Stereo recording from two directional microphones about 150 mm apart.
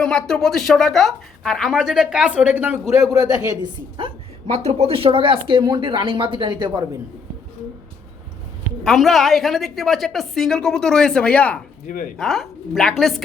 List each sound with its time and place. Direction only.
0.0 s a woman's voice: 5° left (ahead or behind); by 2.7 s 10° right (ahead or behind)
3.1 s a man's voice: 20° right (ahead or behind)
3.6 s speech: 35° right (ahead or behind)
4.5 s speech: 45° right (ahead or behind); by 6.8 s 30° right (ahead or behind)
8.8 s a woman's voice: centre (ahead or behind)